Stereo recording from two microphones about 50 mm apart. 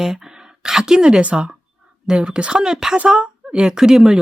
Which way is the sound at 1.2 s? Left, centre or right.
Right.